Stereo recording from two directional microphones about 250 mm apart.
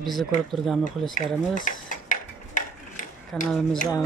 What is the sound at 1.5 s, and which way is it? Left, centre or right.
Mechanisms, left.